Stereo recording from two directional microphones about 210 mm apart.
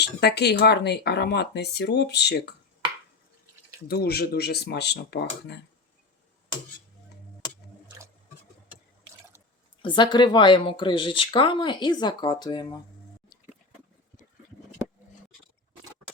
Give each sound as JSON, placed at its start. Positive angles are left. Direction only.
{"t": 0.0, "sound": "speech", "side_deg": 50}
{"t": 3.8, "sound": "speech", "side_deg": 50}
{"t": 9.8, "sound": "speech", "side_deg": 20}